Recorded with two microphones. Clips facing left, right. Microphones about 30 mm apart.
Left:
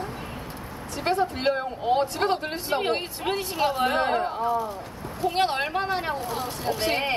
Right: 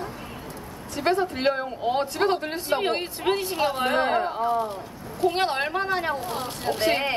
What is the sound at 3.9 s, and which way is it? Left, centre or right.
Speech, centre.